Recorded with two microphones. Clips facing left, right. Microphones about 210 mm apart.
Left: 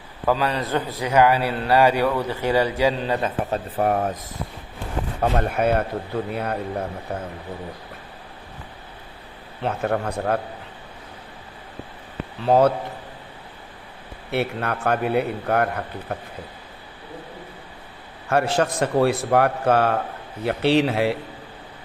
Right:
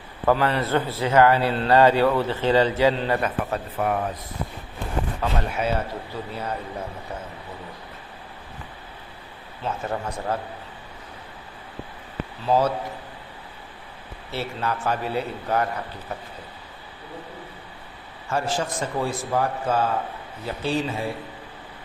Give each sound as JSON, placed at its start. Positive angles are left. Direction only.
{"t": 0.3, "sound": "a man's voice", "side_deg": 15}
{"t": 3.8, "sound": "speech", "side_deg": 40}
{"t": 5.2, "sound": "speech", "side_deg": 55}
{"t": 9.6, "sound": "speech", "side_deg": 65}
{"t": 12.4, "sound": "speech", "side_deg": 60}
{"t": 14.3, "sound": "speech", "side_deg": 60}
{"t": 18.3, "sound": "a man's voice", "side_deg": 65}